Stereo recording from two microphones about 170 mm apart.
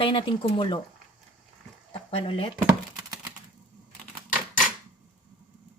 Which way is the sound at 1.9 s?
30° left (ahead or behind).